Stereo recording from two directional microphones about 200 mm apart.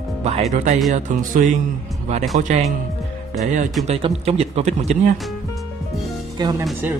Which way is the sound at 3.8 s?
30° right (ahead or behind).